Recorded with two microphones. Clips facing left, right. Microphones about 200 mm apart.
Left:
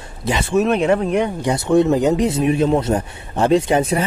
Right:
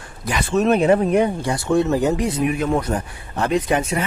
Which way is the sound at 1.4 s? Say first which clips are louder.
Left 4 dB; 20° left (ahead or behind).